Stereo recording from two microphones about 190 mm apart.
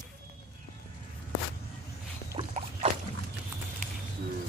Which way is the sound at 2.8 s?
35° right (ahead or behind).